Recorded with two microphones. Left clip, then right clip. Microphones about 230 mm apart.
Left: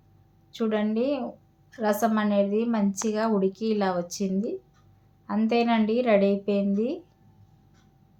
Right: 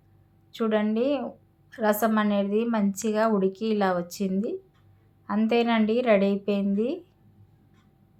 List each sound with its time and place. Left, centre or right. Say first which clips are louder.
0.5 s a woman's voice: right 1 dB; centre